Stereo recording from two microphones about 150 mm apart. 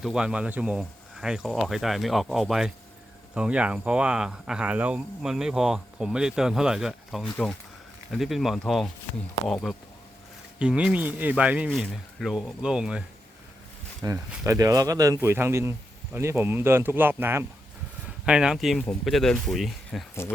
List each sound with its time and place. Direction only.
0.0 s speech: 5° right (ahead or behind)
14.0 s speech: 20° right (ahead or behind); by 20.1 s centre (ahead or behind)